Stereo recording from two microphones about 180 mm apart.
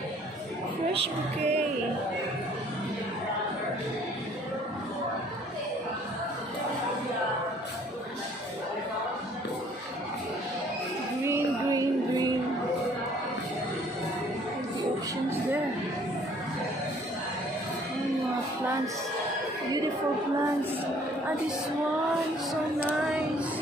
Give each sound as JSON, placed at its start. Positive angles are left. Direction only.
{"t": 1.0, "sound": "music", "side_deg": -35}
{"t": 11.2, "sound": "music", "side_deg": -15}